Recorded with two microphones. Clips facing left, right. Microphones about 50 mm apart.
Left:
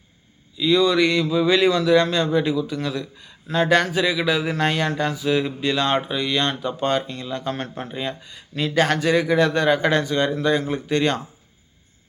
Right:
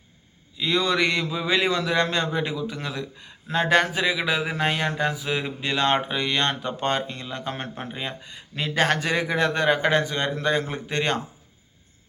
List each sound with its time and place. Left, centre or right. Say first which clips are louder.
0.5 s a man's voice: left 5 dB; right
1.3 s a man's voice: left 6 dB; right
4.4 s a man's voice: left 3 dB; centre; by 11.2 s right